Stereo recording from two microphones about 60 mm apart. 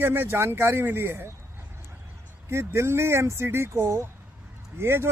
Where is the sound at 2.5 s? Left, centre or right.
Right.